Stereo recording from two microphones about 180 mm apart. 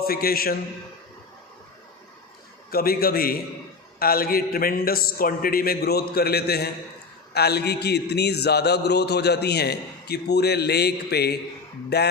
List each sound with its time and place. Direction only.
0.0 s a man's voice: 55° left (ahead or behind)
2.6 s a man's voice: 55° left (ahead or behind)